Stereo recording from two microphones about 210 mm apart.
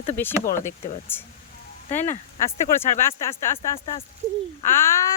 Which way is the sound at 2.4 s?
10° left (ahead or behind).